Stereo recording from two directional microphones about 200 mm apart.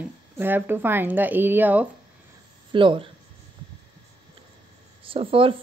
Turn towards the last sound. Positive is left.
turn(degrees=-25)  # may be behind; listen again after turning